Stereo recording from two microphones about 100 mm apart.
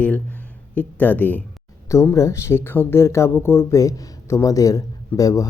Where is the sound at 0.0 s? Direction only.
15° left (ahead or behind).